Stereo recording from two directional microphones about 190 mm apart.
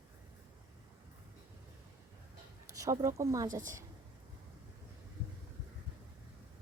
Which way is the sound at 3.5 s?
45° right (ahead or behind).